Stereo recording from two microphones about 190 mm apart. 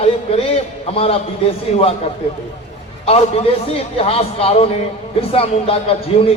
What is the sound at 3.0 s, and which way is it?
A man's voice, 30° left (ahead or behind).